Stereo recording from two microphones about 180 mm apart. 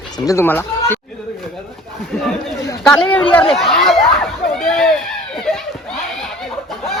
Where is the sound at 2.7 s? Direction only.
10° left (ahead or behind).